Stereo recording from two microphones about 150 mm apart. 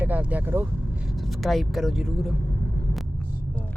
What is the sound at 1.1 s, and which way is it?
Speech, centre (ahead or behind).